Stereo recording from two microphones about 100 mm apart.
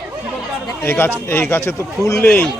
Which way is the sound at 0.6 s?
25° left (ahead or behind).